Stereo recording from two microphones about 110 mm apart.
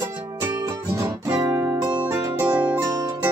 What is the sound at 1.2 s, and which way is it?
Music, 20° right (ahead or behind).